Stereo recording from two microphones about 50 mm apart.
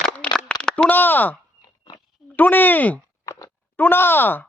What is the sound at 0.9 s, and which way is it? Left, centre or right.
Speech, left.